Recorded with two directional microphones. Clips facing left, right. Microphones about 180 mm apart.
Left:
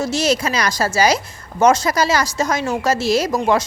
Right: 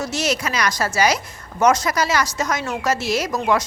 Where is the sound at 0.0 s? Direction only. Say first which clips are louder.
Left 4 dB; 30° left (ahead or behind).